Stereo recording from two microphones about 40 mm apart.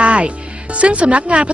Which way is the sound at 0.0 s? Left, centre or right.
Right.